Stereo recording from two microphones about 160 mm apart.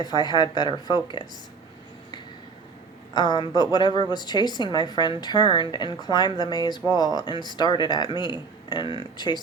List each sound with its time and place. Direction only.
0.0 s a woman's voice: 25° left (ahead or behind)
3.2 s a woman's voice: 25° left (ahead or behind)